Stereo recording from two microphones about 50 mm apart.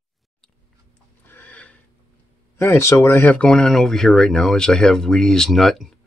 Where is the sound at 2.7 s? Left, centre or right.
Left.